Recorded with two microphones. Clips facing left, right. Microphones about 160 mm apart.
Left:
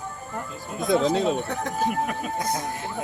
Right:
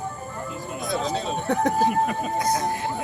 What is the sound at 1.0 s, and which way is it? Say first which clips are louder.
Speech: left 5 dB; 60° left (ahead or behind).